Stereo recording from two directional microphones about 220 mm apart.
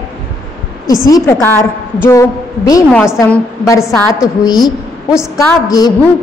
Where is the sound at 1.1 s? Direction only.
10° left (ahead or behind).